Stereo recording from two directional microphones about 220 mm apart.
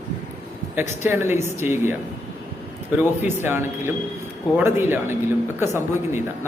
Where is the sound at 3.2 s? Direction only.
10° right (ahead or behind).